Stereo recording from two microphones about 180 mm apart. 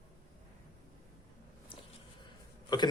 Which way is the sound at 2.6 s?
25° left (ahead or behind).